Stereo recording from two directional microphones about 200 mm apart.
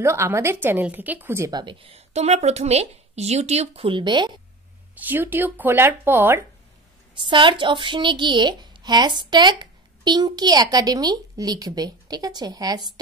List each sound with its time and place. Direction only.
0.0 s a woman's voice: 10° right (ahead or behind)
4.9 s speech: 10° right (ahead or behind)
7.2 s a woman's voice: 25° right (ahead or behind)